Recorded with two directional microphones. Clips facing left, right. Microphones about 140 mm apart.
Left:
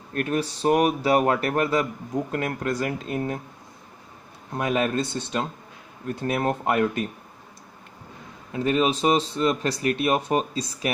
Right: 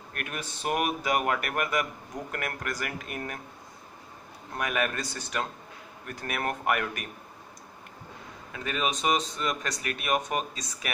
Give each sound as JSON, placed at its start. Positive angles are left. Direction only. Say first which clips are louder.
{"t": 0.1, "sound": "speech", "louder": "left 12 dB", "side_deg": 35}
{"t": 4.6, "sound": "speech", "louder": "left 6 dB", "side_deg": 25}
{"t": 8.5, "sound": "speech", "louder": "left 9 dB", "side_deg": 35}